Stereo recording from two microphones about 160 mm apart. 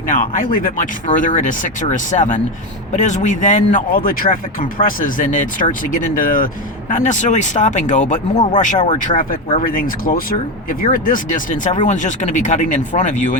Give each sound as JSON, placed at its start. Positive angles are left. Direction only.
{"t": 0.1, "sound": "speech", "side_deg": 55}